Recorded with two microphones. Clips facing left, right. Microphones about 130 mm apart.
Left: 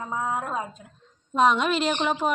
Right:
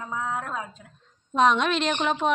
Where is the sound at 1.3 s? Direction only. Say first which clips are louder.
Even; 5° left (ahead or behind).